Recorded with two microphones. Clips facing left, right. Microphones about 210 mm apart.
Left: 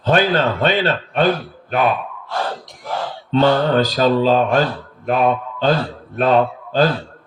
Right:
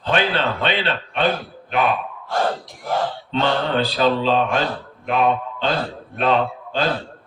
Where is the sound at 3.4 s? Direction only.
40° left (ahead or behind).